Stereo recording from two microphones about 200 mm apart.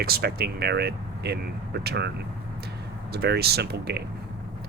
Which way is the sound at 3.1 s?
55° right (ahead or behind).